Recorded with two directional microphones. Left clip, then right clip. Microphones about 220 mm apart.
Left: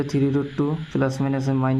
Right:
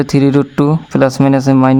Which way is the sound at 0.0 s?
50° right (ahead or behind).